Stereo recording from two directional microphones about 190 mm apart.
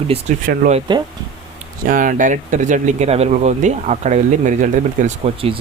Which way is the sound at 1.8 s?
45° right (ahead or behind).